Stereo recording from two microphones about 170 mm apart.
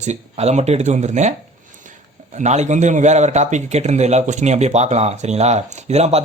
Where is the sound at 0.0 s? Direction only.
40° right (ahead or behind).